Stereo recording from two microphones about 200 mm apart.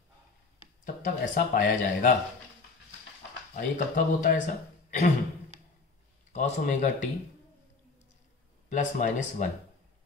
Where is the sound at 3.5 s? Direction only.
40° left (ahead or behind).